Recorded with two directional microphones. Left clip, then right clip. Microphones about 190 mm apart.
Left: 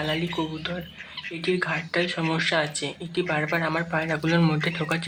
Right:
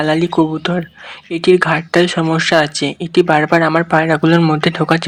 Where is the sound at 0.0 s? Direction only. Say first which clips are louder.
Right 13 dB; 35° right (ahead or behind).